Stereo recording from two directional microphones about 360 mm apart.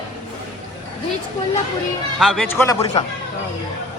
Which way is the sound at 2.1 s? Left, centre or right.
Centre.